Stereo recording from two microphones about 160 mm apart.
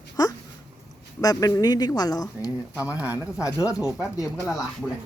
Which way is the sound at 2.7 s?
10° right (ahead or behind).